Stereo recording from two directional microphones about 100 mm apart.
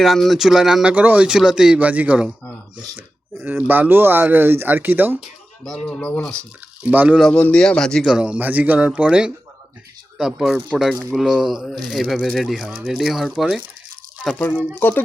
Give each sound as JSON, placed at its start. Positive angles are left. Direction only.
{"t": 0.0, "sound": "speech", "side_deg": 0}
{"t": 3.4, "sound": "speech", "side_deg": -20}
{"t": 5.6, "sound": "speech", "side_deg": 10}
{"t": 6.8, "sound": "speech", "side_deg": -15}
{"t": 7.3, "sound": "speech", "side_deg": 10}
{"t": 8.0, "sound": "speech", "side_deg": -10}
{"t": 12.6, "sound": "speech", "side_deg": -15}
{"t": 12.9, "sound": "speech", "side_deg": 0}
{"t": 14.8, "sound": "speech", "side_deg": 20}